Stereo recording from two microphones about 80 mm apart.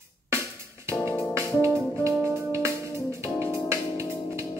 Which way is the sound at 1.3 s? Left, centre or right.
Right.